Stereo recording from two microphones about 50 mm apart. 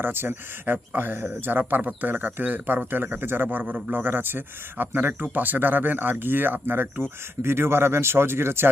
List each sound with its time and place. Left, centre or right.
0.0 s speech: right